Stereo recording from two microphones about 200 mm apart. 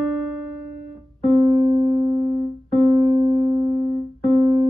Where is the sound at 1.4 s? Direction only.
25° right (ahead or behind).